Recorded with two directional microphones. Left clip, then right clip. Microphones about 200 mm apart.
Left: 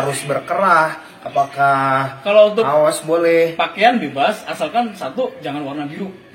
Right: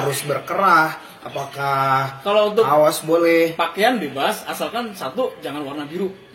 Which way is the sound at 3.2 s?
50° right (ahead or behind).